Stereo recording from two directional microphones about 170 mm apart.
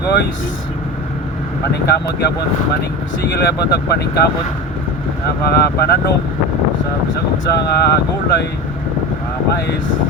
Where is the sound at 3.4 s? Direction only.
70° left (ahead or behind).